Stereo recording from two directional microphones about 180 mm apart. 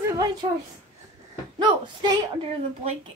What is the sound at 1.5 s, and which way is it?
Speech, 25° right (ahead or behind).